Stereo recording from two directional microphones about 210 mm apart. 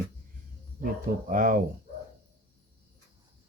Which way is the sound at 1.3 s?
40° right (ahead or behind).